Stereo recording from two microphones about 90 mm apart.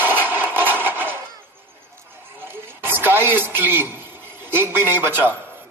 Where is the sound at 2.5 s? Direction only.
25° right (ahead or behind).